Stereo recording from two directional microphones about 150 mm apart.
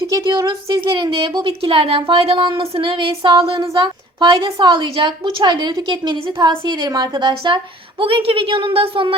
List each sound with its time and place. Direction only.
0.1 s a woman's voice: 30° right (ahead or behind)